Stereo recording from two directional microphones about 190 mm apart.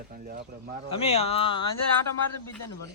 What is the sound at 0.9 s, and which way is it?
Speech, 35° left (ahead or behind).